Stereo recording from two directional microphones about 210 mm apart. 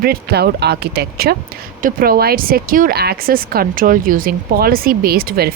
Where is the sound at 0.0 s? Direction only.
50° right (ahead or behind).